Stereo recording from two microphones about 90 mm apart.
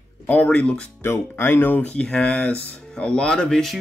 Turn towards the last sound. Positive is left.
turn(degrees=5)  # may be behind; listen again after turning